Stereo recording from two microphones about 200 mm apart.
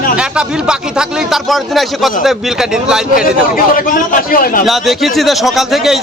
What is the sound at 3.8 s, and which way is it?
Speech, 45° left (ahead or behind).